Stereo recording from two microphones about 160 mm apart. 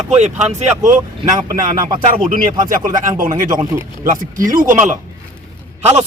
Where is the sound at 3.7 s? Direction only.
20° right (ahead or behind).